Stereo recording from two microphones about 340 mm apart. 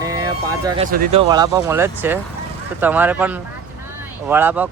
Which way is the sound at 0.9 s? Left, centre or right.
Right.